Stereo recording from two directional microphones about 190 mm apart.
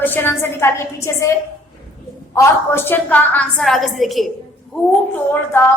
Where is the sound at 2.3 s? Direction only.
15° left (ahead or behind).